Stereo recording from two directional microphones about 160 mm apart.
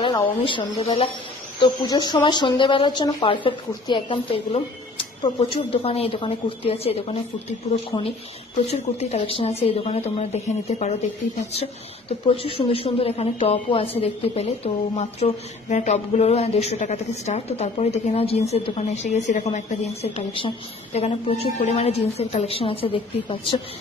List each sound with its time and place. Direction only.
0.0 s a woman's voice: 30° left (ahead or behind)
8.6 s a woman's voice: 40° left (ahead or behind)